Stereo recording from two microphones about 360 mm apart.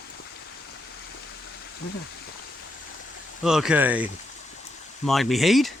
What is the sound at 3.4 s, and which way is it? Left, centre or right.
Speech, centre.